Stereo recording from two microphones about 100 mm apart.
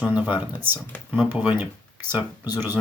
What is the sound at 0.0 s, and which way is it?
Speech, 15° right (ahead or behind).